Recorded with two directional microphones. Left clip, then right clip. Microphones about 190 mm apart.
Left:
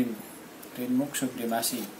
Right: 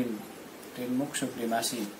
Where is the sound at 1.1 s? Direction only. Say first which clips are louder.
Left 1 dB; 10° left (ahead or behind).